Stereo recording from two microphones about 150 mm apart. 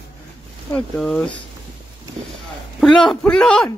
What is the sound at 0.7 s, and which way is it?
Speech, 5° left (ahead or behind).